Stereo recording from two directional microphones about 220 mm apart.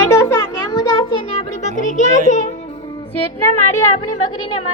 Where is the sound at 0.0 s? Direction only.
15° left (ahead or behind); by 2.5 s 35° left (ahead or behind).